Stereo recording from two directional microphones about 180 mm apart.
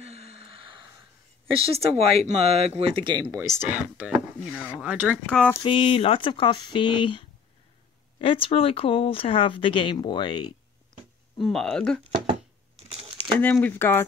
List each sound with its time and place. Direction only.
0.0 s gasp: 35° right (ahead or behind)
1.5 s speech: 35° right (ahead or behind); by 5.2 s 10° right (ahead or behind)
5.3 s speech: 5° left (ahead or behind)
5.6 s speech: 30° left (ahead or behind)
11.4 s speech: 5° left (ahead or behind)
12.8 s crumpling: 35° right (ahead or behind)
13.4 s speech: 10° left (ahead or behind)